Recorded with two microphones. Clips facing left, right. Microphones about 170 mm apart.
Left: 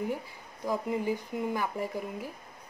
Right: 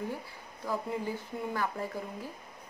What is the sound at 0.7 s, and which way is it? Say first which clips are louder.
Speech: left 4 dB; 15° left (ahead or behind).